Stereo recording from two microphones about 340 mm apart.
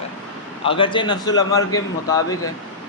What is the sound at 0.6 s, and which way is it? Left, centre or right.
Speech, centre.